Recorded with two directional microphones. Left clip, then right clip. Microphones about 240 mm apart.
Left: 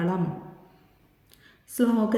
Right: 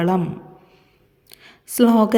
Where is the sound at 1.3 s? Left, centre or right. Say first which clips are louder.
Right 11 dB; right.